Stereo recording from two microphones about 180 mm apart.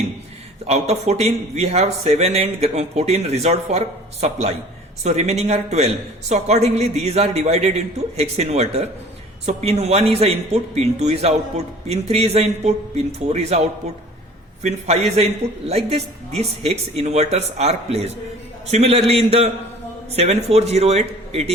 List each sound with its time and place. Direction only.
0.7 s a man's voice: 35° right (ahead or behind)
15.7 s a man's voice: 35° right (ahead or behind)